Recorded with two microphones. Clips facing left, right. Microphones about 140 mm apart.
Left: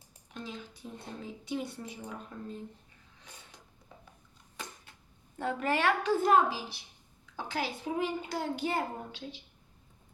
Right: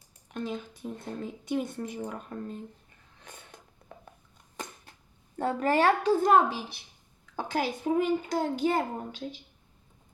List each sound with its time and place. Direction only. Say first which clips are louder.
0.3 s a child's voice: right 8 dB; 55° right (ahead or behind)
3.2 s a sound: right 5 dB; 55° right (ahead or behind)
5.4 s a woman's voice: right 5 dB; 40° right (ahead or behind)